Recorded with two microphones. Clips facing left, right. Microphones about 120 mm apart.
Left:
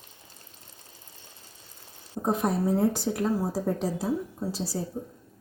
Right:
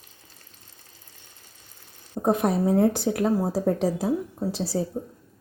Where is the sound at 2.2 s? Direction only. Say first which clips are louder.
Right 4 dB; 65° right (ahead or behind).